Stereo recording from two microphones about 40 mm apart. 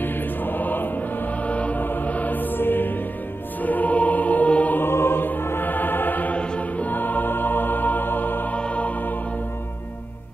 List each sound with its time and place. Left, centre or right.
0.0 s music: left
1.8 s music: left
3.6 s music: left
4.7 s music: left
5.7 s music: left
6.3 s music: left
6.9 s music: left
8.5 s music: left